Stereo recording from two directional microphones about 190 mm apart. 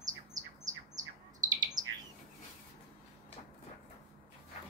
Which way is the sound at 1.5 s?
20° right (ahead or behind).